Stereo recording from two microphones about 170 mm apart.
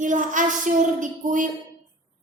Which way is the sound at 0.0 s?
50° right (ahead or behind).